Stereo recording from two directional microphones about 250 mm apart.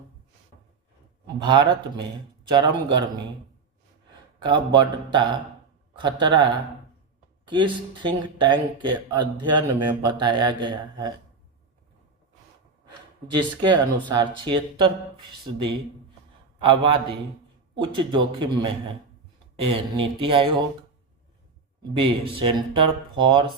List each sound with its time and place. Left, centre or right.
1.4 s speech: centre
4.4 s speech: centre
13.3 s speech: centre
16.6 s speech: centre
21.9 s speech: right